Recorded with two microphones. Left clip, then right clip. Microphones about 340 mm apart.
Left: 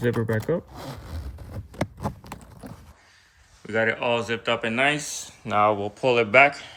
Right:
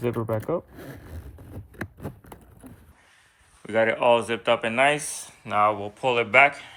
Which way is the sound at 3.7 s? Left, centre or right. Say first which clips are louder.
Right 3 dB; centre.